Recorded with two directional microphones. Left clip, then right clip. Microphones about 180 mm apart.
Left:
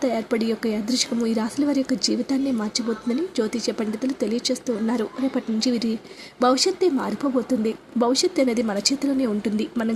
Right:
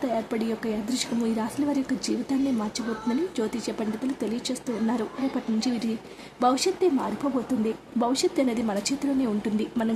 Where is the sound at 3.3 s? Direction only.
15° left (ahead or behind).